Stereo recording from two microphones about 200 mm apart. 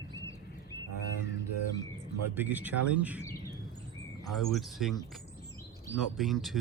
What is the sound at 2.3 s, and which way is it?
Speech, 10° right (ahead or behind).